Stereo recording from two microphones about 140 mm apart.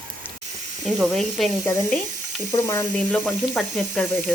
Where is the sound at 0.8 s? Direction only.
Centre (ahead or behind).